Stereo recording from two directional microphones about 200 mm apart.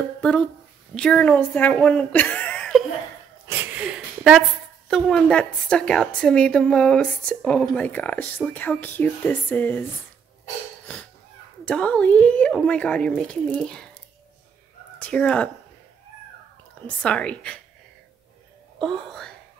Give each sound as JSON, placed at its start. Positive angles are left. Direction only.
{"t": 0.2, "sound": "speech", "side_deg": 5}
{"t": 3.4, "sound": "a woman's voice", "side_deg": -10}
{"t": 11.6, "sound": "a woman's voice", "side_deg": 5}
{"t": 15.0, "sound": "speech", "side_deg": 5}
{"t": 16.8, "sound": "a woman's voice", "side_deg": 5}
{"t": 18.8, "sound": "a woman's voice", "side_deg": 0}